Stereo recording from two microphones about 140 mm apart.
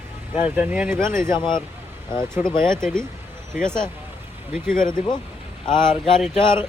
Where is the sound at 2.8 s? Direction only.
5° left (ahead or behind).